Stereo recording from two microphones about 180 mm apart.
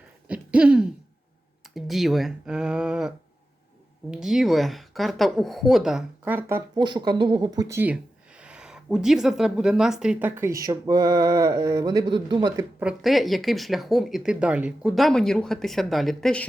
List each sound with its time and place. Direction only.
0.3 s hoot: 5° right (ahead or behind)
1.7 s speech: centre (ahead or behind)
4.1 s speech: centre (ahead or behind)
6.7 s speech: 25° right (ahead or behind)
12.8 s speech: centre (ahead or behind)